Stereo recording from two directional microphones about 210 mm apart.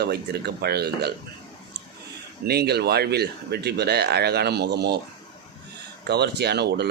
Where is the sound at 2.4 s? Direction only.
50° right (ahead or behind).